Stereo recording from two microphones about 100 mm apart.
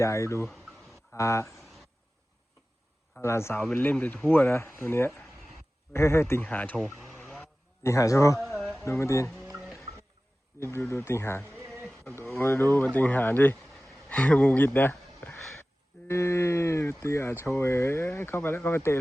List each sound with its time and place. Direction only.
0.0 s a man's voice: 30° left (ahead or behind)
3.2 s speech: 25° left (ahead or behind)
6.4 s speech: 15° left (ahead or behind)
7.9 s a man's voice: 30° left (ahead or behind)
10.6 s speech: 25° left (ahead or behind)